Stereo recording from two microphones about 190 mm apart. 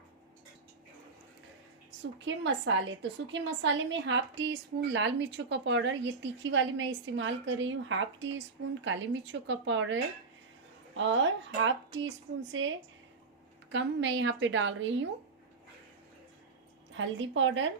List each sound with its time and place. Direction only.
2.2 s a woman's voice: 75° right (ahead or behind)
16.9 s a woman's voice: 85° right